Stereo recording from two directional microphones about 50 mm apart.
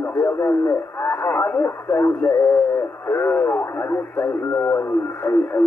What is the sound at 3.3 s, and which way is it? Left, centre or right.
Speech, left.